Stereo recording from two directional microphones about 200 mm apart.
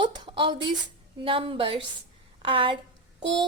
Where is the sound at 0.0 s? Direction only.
25° right (ahead or behind).